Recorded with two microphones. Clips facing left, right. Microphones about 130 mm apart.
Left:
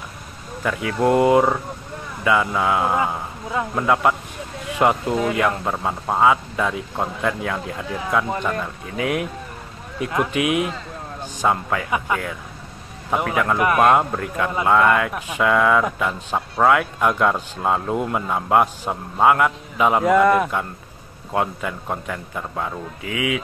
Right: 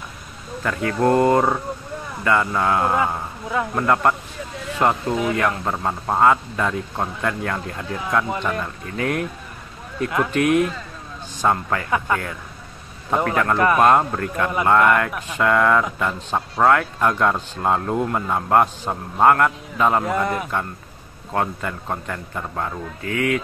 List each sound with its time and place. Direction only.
0.7 s speech: 5° left (ahead or behind)
20.1 s a man's voice: 75° left (ahead or behind)
21.3 s speech: 10° left (ahead or behind)